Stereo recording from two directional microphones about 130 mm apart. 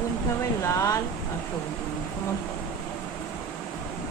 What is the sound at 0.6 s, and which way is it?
Speech, 25° left (ahead or behind).